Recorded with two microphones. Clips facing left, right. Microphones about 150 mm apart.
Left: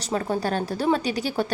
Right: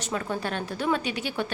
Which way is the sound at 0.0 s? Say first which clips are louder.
Left 5 dB; 35° left (ahead or behind).